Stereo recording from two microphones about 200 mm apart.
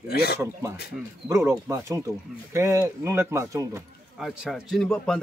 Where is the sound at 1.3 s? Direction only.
15° right (ahead or behind).